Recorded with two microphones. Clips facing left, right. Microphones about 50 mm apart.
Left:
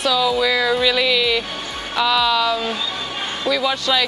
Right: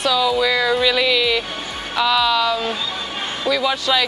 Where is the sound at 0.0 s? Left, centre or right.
Centre.